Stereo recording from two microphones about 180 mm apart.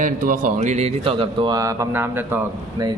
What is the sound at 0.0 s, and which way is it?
Speech, 50° right (ahead or behind).